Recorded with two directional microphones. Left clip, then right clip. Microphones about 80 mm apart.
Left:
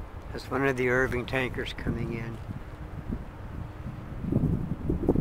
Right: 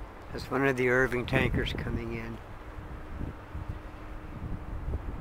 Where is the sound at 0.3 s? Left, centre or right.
Centre.